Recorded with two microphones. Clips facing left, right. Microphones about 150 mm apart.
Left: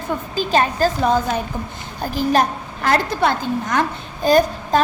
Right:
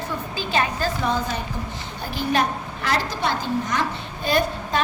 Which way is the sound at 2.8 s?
55° left (ahead or behind).